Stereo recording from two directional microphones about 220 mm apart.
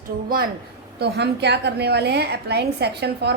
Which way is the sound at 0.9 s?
50° right (ahead or behind).